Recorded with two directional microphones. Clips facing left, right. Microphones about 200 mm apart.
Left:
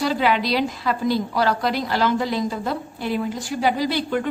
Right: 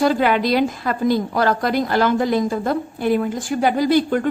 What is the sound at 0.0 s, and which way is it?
A woman's voice, 50° right (ahead or behind).